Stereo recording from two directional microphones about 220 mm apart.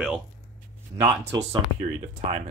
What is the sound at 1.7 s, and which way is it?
Speech, 30° right (ahead or behind).